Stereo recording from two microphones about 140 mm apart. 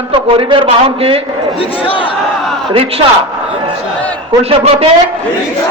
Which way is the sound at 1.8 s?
40° left (ahead or behind).